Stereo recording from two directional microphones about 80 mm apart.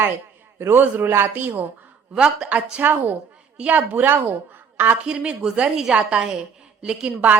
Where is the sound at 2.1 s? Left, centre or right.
Centre.